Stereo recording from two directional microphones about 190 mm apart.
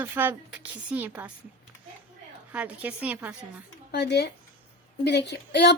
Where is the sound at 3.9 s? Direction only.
60° left (ahead or behind).